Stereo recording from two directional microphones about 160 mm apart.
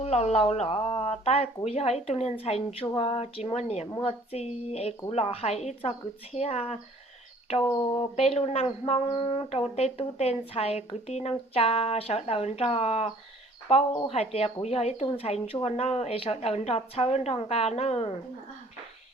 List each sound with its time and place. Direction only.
0.0 s speech: 40° left (ahead or behind)
14.1 s speech: 40° left (ahead or behind)